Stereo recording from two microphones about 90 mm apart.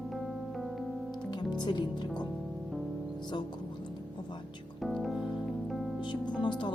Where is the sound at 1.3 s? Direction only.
55° left (ahead or behind).